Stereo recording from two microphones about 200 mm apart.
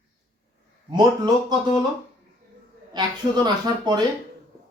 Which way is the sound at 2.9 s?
20° right (ahead or behind).